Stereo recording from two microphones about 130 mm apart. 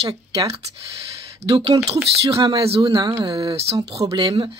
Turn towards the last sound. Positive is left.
turn(degrees=-45)  # may be behind; listen again after turning